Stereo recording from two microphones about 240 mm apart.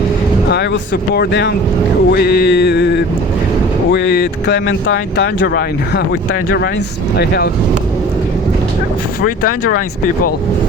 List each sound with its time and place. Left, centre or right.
0.5 s speech: left
7.2 s speech: left